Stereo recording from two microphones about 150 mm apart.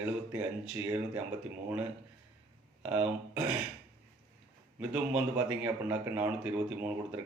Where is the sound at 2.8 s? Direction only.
10° right (ahead or behind).